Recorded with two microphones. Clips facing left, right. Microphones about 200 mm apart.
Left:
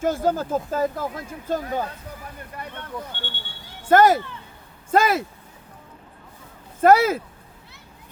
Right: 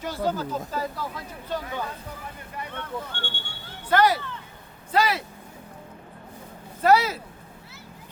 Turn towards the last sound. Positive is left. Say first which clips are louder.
# left 4 dB
turn(degrees=50)  # may be behind; listen again after turning